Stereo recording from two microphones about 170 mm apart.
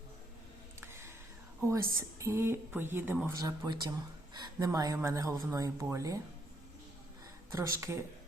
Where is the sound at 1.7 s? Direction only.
15° right (ahead or behind).